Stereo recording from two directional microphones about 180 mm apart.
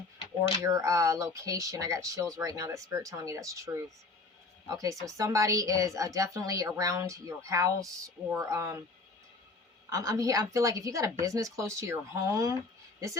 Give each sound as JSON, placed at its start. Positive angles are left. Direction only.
{"t": 0.6, "sound": "a woman's voice", "side_deg": -15}
{"t": 9.9, "sound": "a woman's voice", "side_deg": -20}